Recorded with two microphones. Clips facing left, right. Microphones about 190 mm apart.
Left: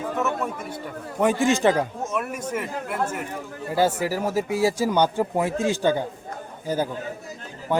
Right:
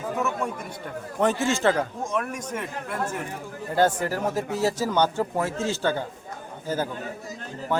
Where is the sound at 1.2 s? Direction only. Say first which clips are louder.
Left 3 dB; 10° left (ahead or behind).